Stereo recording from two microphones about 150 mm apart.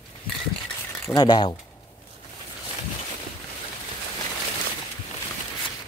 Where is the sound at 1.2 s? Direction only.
30° left (ahead or behind).